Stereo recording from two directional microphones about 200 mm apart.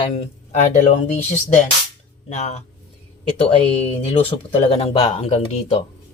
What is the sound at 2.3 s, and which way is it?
Speech, 35° left (ahead or behind).